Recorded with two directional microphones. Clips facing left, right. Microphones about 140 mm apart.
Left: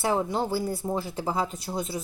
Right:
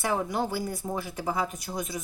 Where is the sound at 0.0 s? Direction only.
25° left (ahead or behind).